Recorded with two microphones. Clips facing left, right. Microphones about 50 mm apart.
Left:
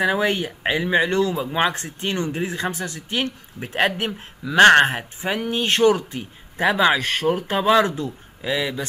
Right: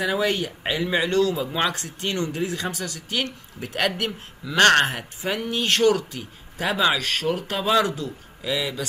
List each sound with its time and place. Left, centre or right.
0.0 s speech: left